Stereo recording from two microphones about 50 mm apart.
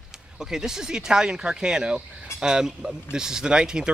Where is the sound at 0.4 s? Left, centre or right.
Centre.